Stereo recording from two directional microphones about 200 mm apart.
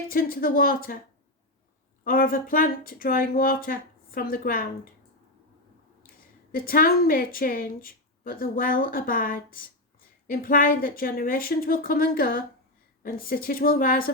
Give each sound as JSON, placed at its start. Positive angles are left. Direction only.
{"t": 0.1, "sound": "a woman's voice", "side_deg": 45}
{"t": 2.0, "sound": "a woman's voice", "side_deg": 45}
{"t": 6.5, "sound": "a woman's voice", "side_deg": 45}